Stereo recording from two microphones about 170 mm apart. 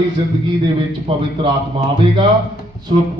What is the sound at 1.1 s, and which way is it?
Speech, 30° right (ahead or behind).